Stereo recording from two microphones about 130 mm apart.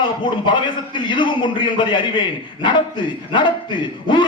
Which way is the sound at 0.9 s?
40° left (ahead or behind).